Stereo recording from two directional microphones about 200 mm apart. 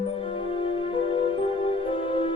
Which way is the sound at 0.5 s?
25° left (ahead or behind).